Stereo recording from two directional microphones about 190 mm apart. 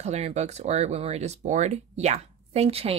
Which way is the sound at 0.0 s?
35° right (ahead or behind).